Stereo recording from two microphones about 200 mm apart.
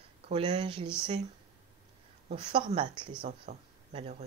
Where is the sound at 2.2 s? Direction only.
25° right (ahead or behind).